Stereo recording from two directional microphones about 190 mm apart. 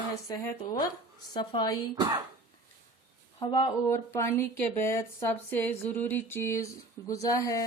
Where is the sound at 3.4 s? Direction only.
25° left (ahead or behind).